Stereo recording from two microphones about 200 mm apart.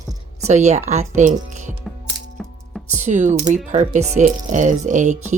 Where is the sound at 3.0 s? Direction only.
35° right (ahead or behind).